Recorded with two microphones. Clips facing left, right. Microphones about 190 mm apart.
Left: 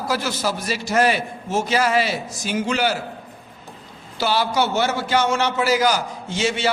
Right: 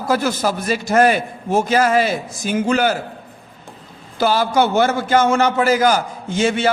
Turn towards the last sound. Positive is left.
turn(degrees=-50)  # may be behind; listen again after turning